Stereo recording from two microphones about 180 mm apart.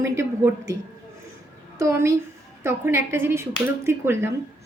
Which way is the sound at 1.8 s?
15° right (ahead or behind).